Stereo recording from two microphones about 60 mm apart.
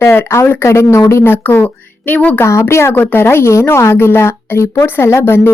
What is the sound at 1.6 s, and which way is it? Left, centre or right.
Speech, left.